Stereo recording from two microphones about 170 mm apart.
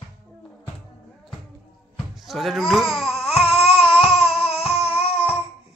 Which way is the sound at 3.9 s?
Centre (ahead or behind).